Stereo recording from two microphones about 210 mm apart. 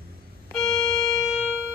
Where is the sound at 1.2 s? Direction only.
5° right (ahead or behind).